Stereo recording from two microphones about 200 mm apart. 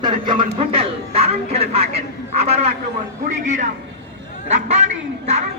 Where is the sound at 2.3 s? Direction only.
30° right (ahead or behind).